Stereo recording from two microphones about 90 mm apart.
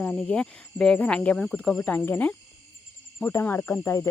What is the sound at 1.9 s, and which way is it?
Cricket, 20° left (ahead or behind).